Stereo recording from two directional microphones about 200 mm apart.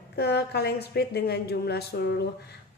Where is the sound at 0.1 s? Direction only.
55° left (ahead or behind).